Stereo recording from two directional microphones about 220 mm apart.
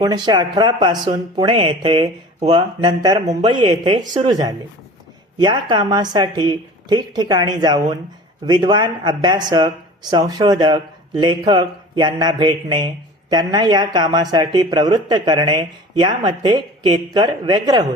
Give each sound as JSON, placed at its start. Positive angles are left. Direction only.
{"t": 0.0, "sound": "speech", "side_deg": -20}